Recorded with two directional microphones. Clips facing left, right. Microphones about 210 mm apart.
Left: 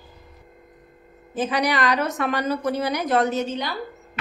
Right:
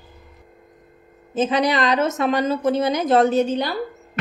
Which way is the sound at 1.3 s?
25° right (ahead or behind).